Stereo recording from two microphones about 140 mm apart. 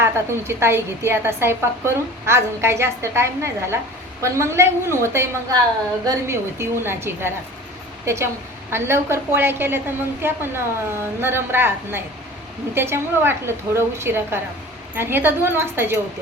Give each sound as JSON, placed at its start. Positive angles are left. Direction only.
{"t": 0.0, "sound": "a woman's voice", "side_deg": -20}